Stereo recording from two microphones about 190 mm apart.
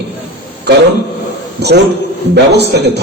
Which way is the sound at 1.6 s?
65° right (ahead or behind).